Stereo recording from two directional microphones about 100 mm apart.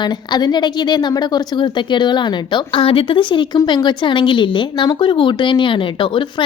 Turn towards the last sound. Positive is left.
turn(degrees=55)  # may be behind; listen again after turning